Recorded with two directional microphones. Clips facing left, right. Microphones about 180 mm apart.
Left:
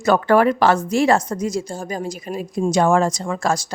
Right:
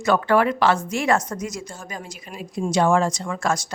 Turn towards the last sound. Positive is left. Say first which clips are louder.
# left 3 dB
turn(degrees=35)  # may be behind; listen again after turning